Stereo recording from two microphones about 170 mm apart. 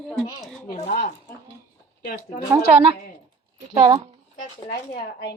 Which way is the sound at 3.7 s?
25° right (ahead or behind).